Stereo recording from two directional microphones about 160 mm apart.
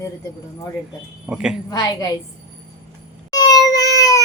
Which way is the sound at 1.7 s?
25° left (ahead or behind).